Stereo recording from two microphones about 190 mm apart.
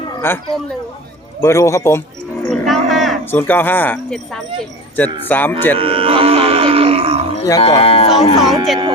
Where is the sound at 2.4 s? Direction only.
Centre (ahead or behind).